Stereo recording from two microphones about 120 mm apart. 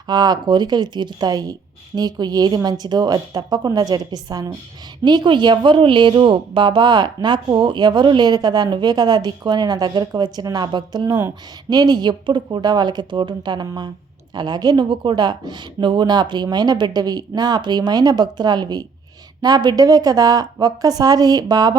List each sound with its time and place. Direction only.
0.1 s speech: 35° right (ahead or behind)